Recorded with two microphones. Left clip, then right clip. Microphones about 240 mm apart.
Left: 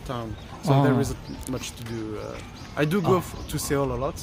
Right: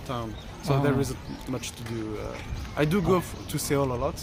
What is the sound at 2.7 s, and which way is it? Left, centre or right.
A man's voice, centre.